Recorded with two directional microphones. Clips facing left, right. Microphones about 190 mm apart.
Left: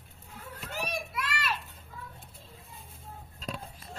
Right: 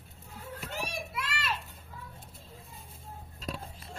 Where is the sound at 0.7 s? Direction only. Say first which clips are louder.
Left 3 dB; 25° right (ahead or behind).